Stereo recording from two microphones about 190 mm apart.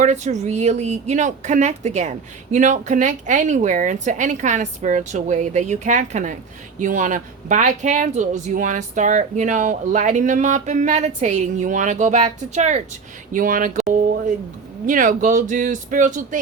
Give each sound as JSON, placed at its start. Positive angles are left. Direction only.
{"t": 0.0, "sound": "speech", "side_deg": -40}
{"t": 14.8, "sound": "speech", "side_deg": -45}